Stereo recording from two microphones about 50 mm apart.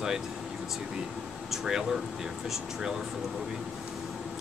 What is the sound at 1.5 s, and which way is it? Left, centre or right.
Speech, centre.